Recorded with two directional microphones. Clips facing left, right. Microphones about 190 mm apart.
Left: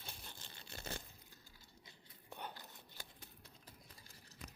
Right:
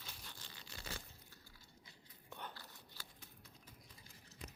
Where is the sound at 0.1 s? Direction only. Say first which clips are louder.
Left 3 dB; 25° left (ahead or behind).